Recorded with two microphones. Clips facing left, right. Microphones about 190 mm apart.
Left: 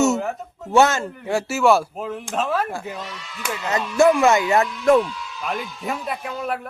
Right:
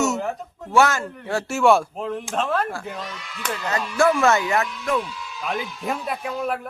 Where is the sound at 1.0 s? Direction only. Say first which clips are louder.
Left 3 dB; 10° left (ahead or behind).